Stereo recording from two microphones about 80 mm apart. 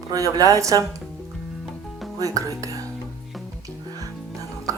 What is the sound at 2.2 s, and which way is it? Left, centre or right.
Speech, right.